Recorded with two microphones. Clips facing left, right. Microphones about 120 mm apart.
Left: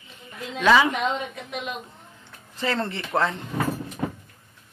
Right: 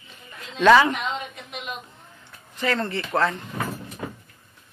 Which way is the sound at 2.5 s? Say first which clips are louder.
Right 1 dB; 25° left (ahead or behind).